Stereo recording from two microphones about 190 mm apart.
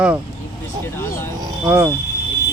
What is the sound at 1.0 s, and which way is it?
Speech, 15° left (ahead or behind).